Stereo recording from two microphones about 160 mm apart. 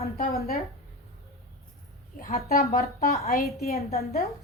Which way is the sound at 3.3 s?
60° left (ahead or behind).